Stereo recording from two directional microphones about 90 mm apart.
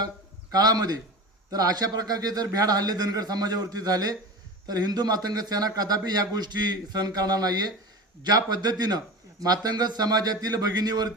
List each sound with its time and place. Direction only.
0.5 s a man's voice: 45° right (ahead or behind)